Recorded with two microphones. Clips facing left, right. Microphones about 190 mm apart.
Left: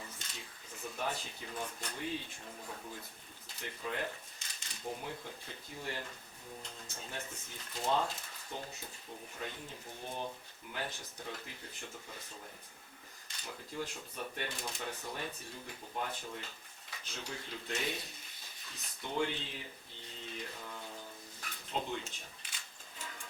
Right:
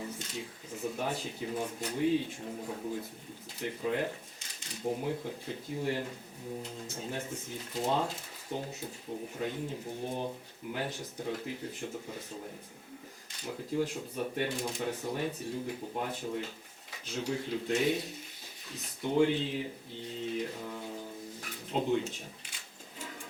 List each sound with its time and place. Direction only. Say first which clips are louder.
0.0 s a sound: right 10 dB; 10° right (ahead or behind)
2.4 s speech: right 9 dB; 20° right (ahead or behind)
3.5 s speech: right 8 dB; 10° right (ahead or behind)
10.0 s speech: right 5 dB; 40° right (ahead or behind)
10.7 s speech: right 6 dB; 10° right (ahead or behind)
13.3 s speech: right 10 dB; 10° right (ahead or behind)
20.6 s mantra: right 7 dB; 15° right (ahead or behind)
21.4 s a sound: right 7 dB; 10° right (ahead or behind)